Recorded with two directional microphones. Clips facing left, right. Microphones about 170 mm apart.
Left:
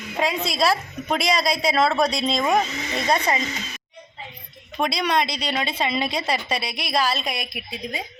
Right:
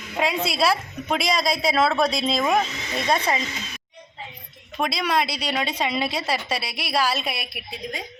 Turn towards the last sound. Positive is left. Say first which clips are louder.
# left 2 dB
turn(degrees=0)  # may be behind; listen again after turning